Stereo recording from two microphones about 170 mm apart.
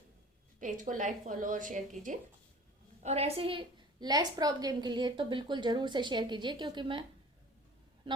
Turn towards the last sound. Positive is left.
turn(degrees=-30)  # may be behind; listen again after turning